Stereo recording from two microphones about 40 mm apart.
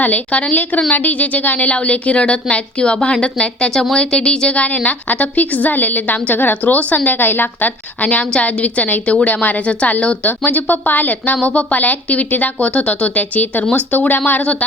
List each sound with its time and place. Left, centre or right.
0.0 s a woman's voice: left; by 4.5 s centre
4.5 s a woman's voice: left
8.0 s a woman's voice: left
9.6 s a woman's voice: left
10.2 s a woman's voice: left
13.1 s a woman's voice: left